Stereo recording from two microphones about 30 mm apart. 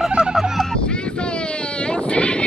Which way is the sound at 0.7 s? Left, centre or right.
Left.